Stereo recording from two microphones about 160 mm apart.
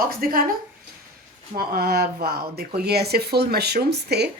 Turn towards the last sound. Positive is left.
turn(degrees=-90)